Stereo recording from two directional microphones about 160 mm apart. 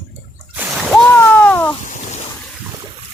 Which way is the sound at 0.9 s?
5° left (ahead or behind).